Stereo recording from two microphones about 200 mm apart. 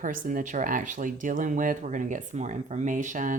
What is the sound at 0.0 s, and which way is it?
Speech, 40° right (ahead or behind).